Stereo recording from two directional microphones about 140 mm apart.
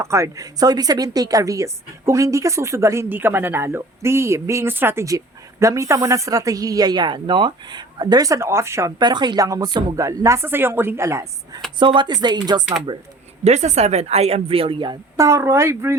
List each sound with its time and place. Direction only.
0.0 s speech: 20° right (ahead or behind)
9.0 s speech: 30° right (ahead or behind)
11.8 s speech: 35° right (ahead or behind)
13.4 s speech: 55° right (ahead or behind); by 15.2 s 35° right (ahead or behind)
15.2 s speech: 20° right (ahead or behind)